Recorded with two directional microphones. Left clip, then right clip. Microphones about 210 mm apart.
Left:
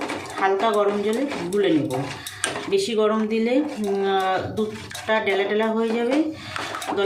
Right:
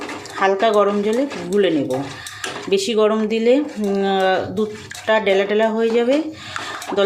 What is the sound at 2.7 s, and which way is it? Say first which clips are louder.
Speech: right 5 dB; 45° right (ahead or behind).